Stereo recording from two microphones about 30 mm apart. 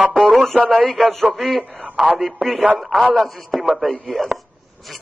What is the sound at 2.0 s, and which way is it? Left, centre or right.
Speech, centre.